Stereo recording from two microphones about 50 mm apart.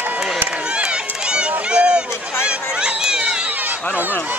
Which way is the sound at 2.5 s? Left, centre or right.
Centre.